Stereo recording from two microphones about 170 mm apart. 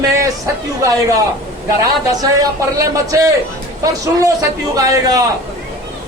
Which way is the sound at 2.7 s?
20° right (ahead or behind).